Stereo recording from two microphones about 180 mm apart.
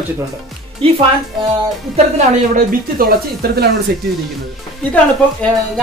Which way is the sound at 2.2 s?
40° right (ahead or behind).